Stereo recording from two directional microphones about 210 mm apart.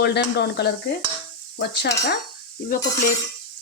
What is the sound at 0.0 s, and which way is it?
Speech, 50° left (ahead or behind).